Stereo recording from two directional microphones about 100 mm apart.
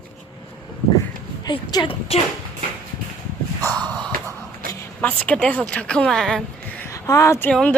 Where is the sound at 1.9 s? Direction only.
75° left (ahead or behind).